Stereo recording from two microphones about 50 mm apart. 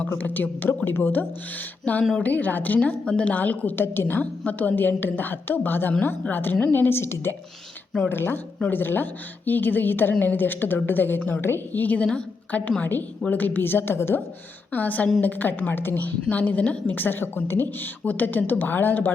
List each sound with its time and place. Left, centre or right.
0.2 s a woman's voice: left
1.8 s a woman's voice: left
3.1 s a woman's voice: left
3.3 s a woman's voice: left
14.7 s a woman's voice: left
16.3 s a woman's voice: left
18.0 s a woman's voice: left